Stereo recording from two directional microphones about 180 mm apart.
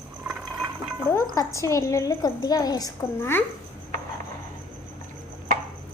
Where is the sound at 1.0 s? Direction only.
15° left (ahead or behind).